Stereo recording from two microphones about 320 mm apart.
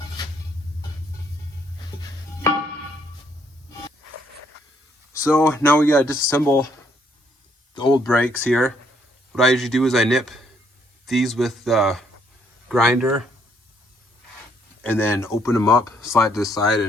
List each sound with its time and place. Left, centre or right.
5.1 s speech: centre
7.7 s a sound: centre
8.3 s a man's voice: centre
14.8 s speech: centre